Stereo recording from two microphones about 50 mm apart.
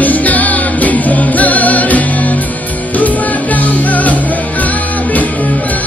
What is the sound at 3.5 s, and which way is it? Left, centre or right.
Music, left.